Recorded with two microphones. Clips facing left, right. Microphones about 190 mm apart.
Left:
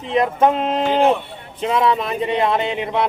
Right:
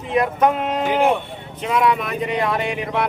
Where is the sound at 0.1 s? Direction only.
25° left (ahead or behind).